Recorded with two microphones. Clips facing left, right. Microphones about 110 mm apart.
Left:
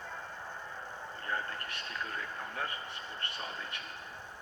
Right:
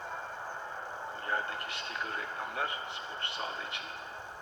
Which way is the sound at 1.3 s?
20° right (ahead or behind).